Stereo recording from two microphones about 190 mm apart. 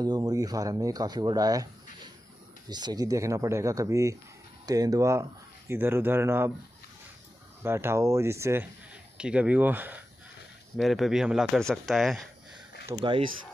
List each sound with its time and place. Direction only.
0.0 s speech: 20° right (ahead or behind)
2.7 s speech: 20° right (ahead or behind)
7.6 s a man's voice: 15° right (ahead or behind)
12.9 s speech: 20° right (ahead or behind)